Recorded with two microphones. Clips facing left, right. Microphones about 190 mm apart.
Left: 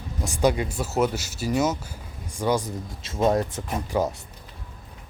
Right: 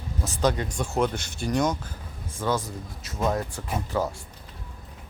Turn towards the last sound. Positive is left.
turn(degrees=15)  # may be behind; listen again after turning